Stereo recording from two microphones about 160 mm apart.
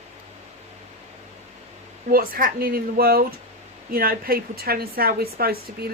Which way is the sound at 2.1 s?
65° right (ahead or behind).